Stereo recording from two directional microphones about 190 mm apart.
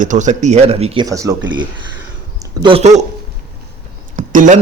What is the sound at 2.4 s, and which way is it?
Speech, 30° right (ahead or behind).